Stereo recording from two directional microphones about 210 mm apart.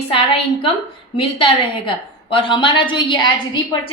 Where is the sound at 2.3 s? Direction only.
25° left (ahead or behind).